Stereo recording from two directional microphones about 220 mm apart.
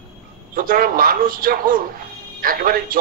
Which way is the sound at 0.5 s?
40° right (ahead or behind).